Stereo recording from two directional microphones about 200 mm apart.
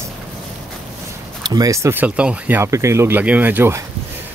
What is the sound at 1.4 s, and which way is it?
Speech, 20° right (ahead or behind).